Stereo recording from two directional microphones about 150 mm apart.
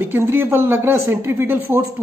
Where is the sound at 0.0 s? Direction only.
15° right (ahead or behind).